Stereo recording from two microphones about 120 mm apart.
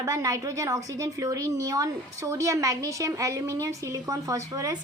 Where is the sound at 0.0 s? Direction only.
30° right (ahead or behind).